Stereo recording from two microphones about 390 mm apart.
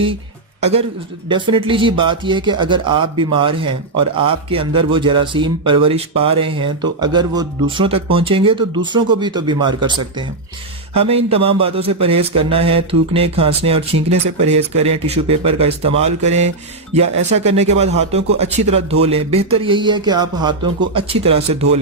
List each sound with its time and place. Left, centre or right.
0.6 s a man's voice: centre